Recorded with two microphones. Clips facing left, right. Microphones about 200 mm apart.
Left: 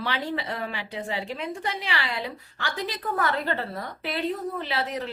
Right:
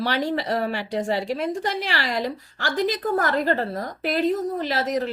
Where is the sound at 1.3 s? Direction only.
45° right (ahead or behind).